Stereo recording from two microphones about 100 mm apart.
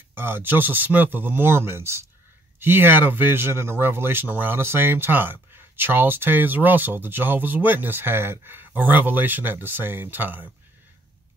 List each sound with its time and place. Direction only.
0.1 s speech: 20° right (ahead or behind)